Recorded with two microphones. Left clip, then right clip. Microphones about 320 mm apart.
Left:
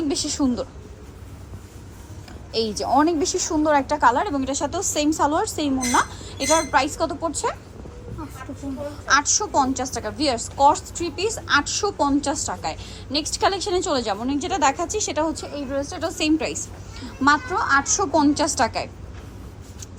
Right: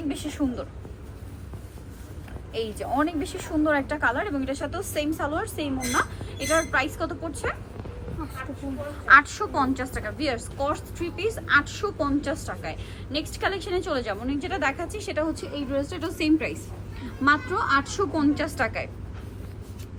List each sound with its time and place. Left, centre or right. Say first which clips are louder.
0.1 s a woman's voice: left 6 dB; centre
2.6 s a woman's voice: left 7 dB; centre
9.0 s a woman's voice: right 2 dB; centre